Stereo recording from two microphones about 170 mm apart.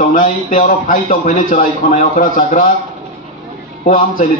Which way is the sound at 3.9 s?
55° left (ahead or behind).